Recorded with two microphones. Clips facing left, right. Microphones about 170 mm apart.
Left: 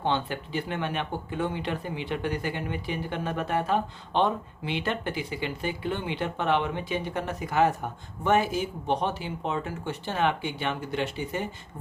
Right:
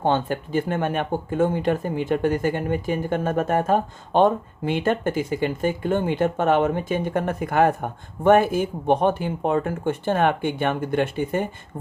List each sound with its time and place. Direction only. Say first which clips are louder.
0.0 s speech: right 6 dB; 45° right (ahead or behind)